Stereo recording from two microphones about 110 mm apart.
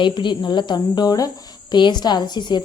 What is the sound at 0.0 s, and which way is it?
A woman's voice, 45° left (ahead or behind).